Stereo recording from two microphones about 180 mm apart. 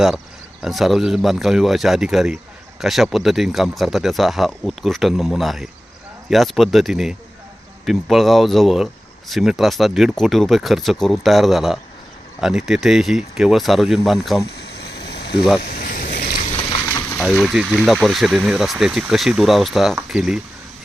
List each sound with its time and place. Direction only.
0.6 s speech: centre (ahead or behind)
14.4 s a sound: 65° left (ahead or behind)
15.4 s speech: 5° right (ahead or behind)
15.6 s vehicle: 55° left (ahead or behind)
16.9 s a sound: 10° left (ahead or behind)
17.2 s speech: centre (ahead or behind)